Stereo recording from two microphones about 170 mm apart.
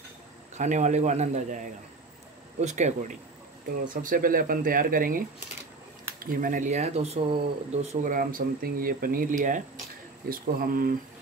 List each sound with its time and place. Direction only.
0.6 s speech: 45° right (ahead or behind)
2.6 s speech: 45° right (ahead or behind)